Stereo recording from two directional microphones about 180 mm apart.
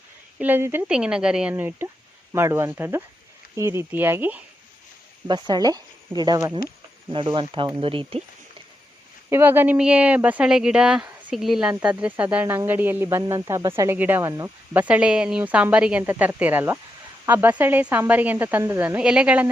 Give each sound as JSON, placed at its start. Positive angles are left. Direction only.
{"t": 0.3, "sound": "speech", "side_deg": -10}
{"t": 5.3, "sound": "speech", "side_deg": -20}
{"t": 9.3, "sound": "speech", "side_deg": -10}